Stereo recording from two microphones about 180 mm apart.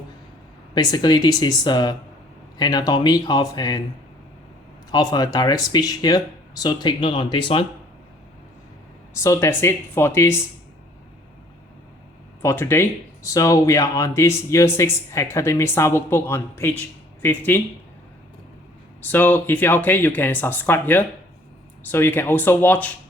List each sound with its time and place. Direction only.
0.7 s speech: 20° left (ahead or behind)
4.9 s speech: 20° left (ahead or behind)
9.1 s speech: 15° left (ahead or behind)
12.4 s speech: 15° left (ahead or behind)
19.0 s speech: 10° left (ahead or behind)